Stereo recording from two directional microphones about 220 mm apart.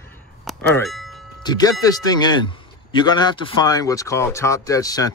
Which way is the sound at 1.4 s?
20° left (ahead or behind).